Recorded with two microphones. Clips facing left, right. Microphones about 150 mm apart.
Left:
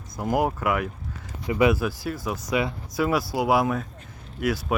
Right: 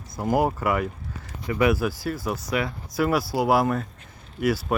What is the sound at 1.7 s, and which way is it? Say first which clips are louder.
Speech: right 1 dB; 5° right (ahead or behind).